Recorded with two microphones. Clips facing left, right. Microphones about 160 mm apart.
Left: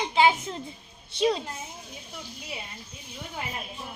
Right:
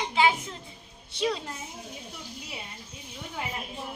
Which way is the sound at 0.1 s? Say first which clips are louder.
Left 3 dB; 25° left (ahead or behind).